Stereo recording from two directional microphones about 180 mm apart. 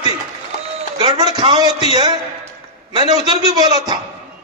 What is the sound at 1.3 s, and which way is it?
Speech, 25° right (ahead or behind).